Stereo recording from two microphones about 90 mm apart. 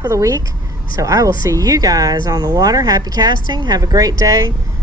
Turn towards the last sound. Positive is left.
turn(degrees=-40)  # may be behind; listen again after turning